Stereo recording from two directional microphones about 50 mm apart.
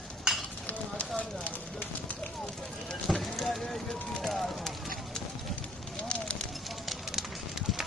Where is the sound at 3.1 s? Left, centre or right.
Centre.